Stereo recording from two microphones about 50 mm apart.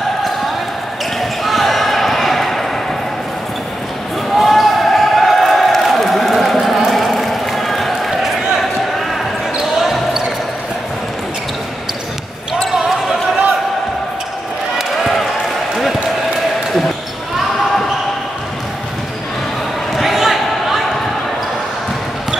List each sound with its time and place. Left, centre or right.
1.4 s basketball bounce: centre
4.3 s basketball bounce: centre
6.9 s a sound: centre
9.6 s basketball bounce: centre
14.8 s a sound: centre
20.0 s basketball bounce: centre